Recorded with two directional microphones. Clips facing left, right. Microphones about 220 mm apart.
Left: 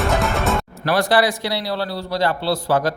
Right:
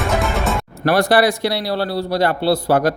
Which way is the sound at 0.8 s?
60° right (ahead or behind).